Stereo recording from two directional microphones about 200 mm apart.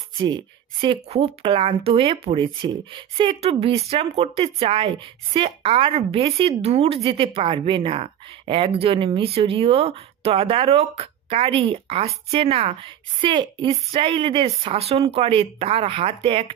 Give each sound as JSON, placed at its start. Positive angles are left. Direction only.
{"t": 0.2, "sound": "speech", "side_deg": -25}